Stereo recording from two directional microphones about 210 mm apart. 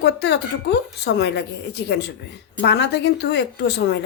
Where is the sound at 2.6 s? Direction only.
55° left (ahead or behind).